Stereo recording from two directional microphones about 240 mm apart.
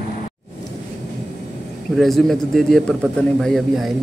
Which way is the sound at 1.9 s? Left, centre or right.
Centre.